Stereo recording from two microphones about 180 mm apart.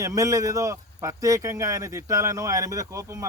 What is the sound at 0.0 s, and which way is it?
Speech, 20° right (ahead or behind).